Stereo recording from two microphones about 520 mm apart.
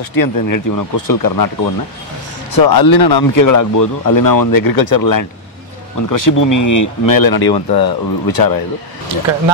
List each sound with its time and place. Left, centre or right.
0.1 s speech: left
2.5 s speech: left